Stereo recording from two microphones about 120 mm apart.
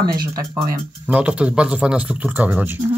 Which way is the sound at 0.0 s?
30° right (ahead or behind).